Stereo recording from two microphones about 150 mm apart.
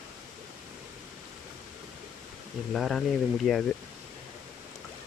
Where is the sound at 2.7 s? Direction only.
Centre (ahead or behind).